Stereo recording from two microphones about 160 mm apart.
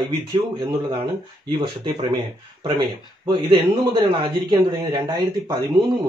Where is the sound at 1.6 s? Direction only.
30° right (ahead or behind).